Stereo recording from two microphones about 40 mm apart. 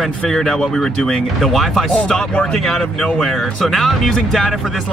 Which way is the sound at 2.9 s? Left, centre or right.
Left.